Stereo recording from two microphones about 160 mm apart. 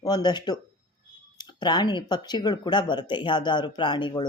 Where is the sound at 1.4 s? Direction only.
30° left (ahead or behind).